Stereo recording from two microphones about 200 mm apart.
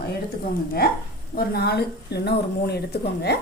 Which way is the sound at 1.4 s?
55° left (ahead or behind).